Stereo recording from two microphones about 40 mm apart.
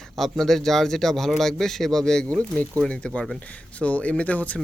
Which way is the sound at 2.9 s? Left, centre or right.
Left.